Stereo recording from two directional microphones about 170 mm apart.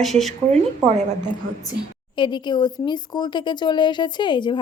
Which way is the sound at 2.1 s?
25° left (ahead or behind).